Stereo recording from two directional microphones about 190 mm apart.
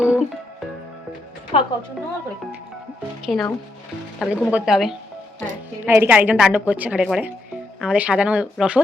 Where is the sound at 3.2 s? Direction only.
Centre (ahead or behind).